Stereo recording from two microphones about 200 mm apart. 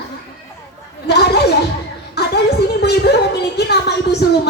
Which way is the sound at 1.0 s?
55° left (ahead or behind).